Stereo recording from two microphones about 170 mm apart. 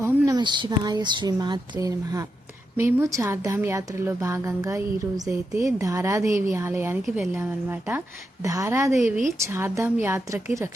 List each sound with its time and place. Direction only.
0.0 s a woman's voice: 25° right (ahead or behind)